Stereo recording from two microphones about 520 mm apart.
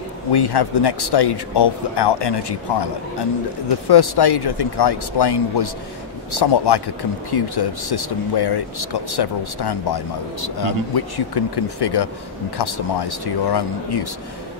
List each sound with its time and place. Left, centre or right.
0.3 s speech: left